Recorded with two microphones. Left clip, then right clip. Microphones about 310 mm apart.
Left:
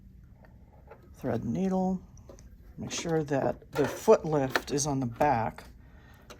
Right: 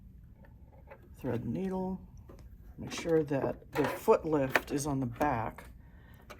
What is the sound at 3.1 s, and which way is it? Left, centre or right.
Speech, left.